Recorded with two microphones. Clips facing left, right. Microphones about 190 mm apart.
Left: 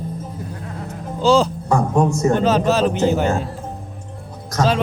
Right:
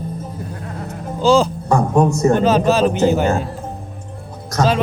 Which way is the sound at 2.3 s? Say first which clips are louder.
Right 2 dB; 10° right (ahead or behind).